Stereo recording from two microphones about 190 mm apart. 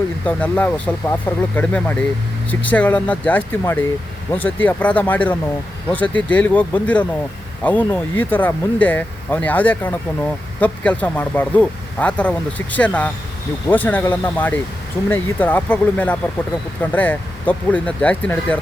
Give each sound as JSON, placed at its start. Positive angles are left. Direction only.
{"t": 0.3, "sound": "speech", "side_deg": 5}